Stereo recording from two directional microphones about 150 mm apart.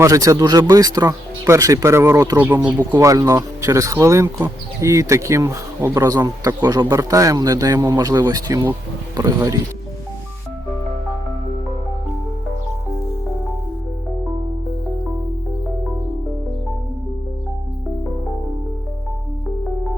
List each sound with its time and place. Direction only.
0.0 s speech: 20° right (ahead or behind)